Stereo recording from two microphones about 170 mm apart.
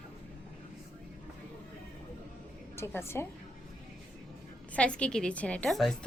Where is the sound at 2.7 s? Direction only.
15° left (ahead or behind).